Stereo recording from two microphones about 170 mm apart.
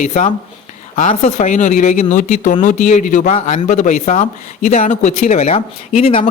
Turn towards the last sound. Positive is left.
turn(degrees=35)  # may be behind; listen again after turning